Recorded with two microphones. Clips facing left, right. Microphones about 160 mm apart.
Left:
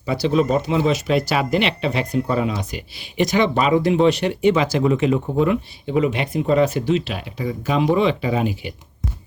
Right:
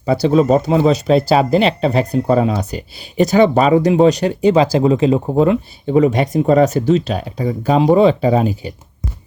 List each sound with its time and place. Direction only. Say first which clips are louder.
0.3 s speech: right 5 dB; 40° right (ahead or behind)